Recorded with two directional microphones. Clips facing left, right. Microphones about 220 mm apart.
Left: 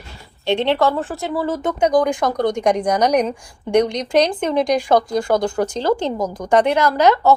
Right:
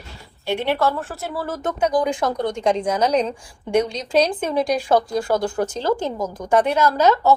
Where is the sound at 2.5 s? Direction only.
15° left (ahead or behind).